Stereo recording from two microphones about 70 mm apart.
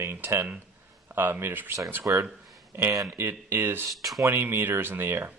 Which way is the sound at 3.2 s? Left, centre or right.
Right.